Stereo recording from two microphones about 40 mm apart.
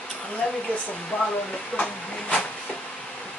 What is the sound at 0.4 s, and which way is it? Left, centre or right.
Speech, centre.